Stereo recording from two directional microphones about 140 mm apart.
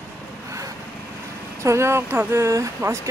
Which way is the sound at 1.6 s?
20° right (ahead or behind).